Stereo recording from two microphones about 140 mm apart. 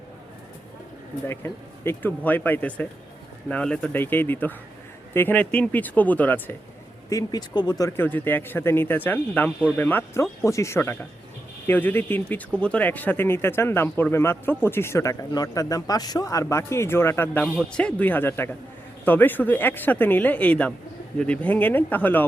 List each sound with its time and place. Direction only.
1.3 s speech: 15° left (ahead or behind)
7.1 s speech: 25° left (ahead or behind)
17.4 s speech: 5° left (ahead or behind)